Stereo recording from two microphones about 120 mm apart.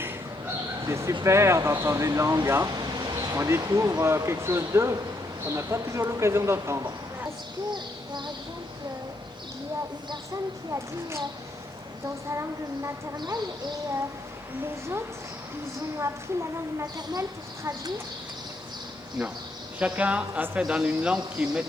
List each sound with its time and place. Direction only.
0.9 s speech: 25° right (ahead or behind)
7.7 s speech: 40° right (ahead or behind)
10.7 s speech: 25° right (ahead or behind)
12.3 s speech: 25° right (ahead or behind)
16.0 s speech: 25° right (ahead or behind)
19.8 s a man's voice: 10° right (ahead or behind)